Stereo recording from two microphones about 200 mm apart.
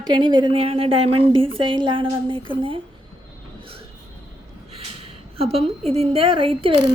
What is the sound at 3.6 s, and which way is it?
Vehicle, 30° right (ahead or behind).